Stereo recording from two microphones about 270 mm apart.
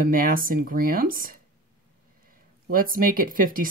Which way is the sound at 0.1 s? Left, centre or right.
Right.